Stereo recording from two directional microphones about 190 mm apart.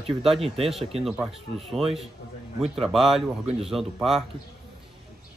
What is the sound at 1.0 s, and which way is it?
Speech, centre (ahead or behind).